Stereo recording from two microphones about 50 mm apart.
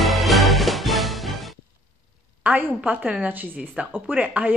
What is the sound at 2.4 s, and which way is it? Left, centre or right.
A woman's voice, right.